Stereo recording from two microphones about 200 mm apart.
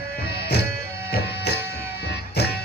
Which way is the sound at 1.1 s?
55° left (ahead or behind).